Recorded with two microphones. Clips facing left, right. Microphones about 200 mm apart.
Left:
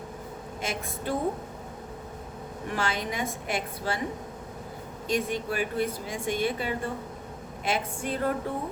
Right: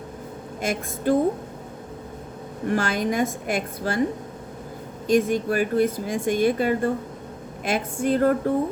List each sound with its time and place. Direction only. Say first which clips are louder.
0.6 s speech: right 8 dB; 50° right (ahead or behind)
2.6 s speech: right 8 dB; 45° right (ahead or behind)
5.0 s speech: right 8 dB; 45° right (ahead or behind)